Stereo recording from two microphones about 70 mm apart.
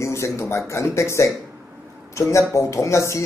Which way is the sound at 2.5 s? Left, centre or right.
Left.